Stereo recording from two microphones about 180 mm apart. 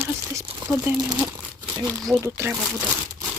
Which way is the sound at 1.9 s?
5° left (ahead or behind).